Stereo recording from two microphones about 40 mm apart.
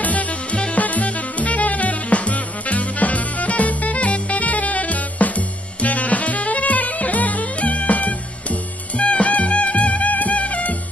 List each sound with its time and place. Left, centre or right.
0.0 s music: left